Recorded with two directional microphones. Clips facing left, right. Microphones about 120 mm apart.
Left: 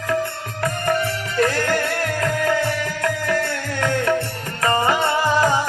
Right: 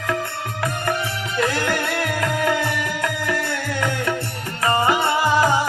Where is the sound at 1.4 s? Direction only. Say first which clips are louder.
Left 2 dB; 45° left (ahead or behind).